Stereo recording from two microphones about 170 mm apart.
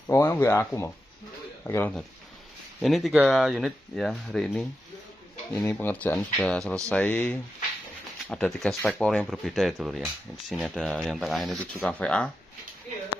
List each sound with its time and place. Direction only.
0.0 s speech: 15° left (ahead or behind)
2.8 s speech: centre (ahead or behind)